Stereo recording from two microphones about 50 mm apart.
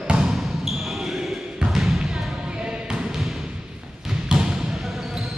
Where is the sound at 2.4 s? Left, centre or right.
Centre.